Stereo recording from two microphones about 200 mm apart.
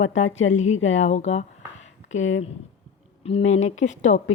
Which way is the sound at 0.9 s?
35° left (ahead or behind).